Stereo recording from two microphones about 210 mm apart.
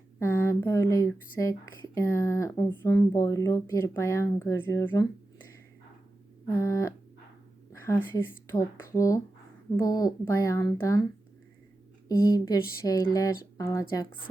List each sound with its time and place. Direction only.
0.2 s speech: 15° left (ahead or behind)
6.6 s speech: 15° left (ahead or behind)
12.0 s speech: 20° left (ahead or behind)